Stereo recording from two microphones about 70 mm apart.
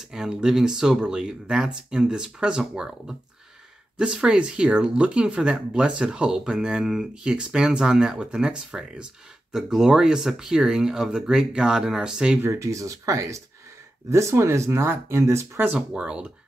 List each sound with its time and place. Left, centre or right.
0.1 s speech: centre
12.4 s speech: right
15.9 s speech: centre